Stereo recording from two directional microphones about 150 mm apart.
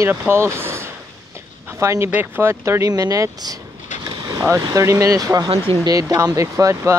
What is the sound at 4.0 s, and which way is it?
Vehicle, 30° right (ahead or behind).